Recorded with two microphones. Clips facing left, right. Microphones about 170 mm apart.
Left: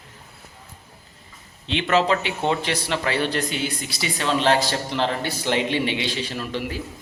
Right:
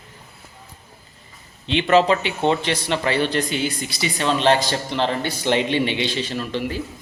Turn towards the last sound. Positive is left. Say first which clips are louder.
# right 3 dB
turn(degrees=5)  # may be behind; listen again after turning